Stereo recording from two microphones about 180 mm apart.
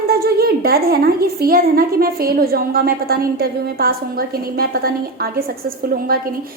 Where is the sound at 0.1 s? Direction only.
60° right (ahead or behind).